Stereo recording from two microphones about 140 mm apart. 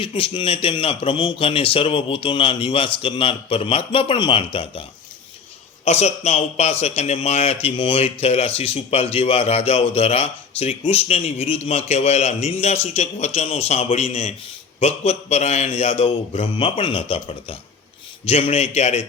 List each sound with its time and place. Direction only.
0.0 s a man's voice: 40° left (ahead or behind)